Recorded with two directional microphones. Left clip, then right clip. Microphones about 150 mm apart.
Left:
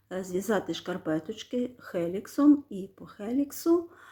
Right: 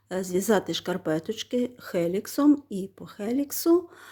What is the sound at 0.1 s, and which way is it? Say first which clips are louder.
Speech: right 5 dB; 50° right (ahead or behind).